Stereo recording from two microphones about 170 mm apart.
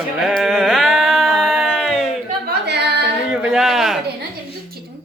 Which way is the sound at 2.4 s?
75° right (ahead or behind).